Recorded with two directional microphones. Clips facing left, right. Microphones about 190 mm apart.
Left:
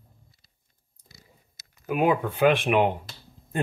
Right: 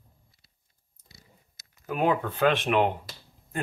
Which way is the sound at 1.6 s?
10° left (ahead or behind).